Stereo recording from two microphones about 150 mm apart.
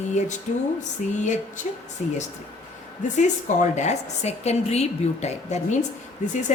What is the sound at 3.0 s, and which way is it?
A woman's voice, 55° left (ahead or behind).